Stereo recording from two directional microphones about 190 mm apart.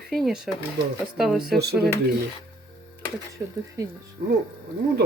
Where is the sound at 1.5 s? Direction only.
60° right (ahead or behind).